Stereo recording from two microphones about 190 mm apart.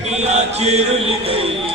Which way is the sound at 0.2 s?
35° right (ahead or behind).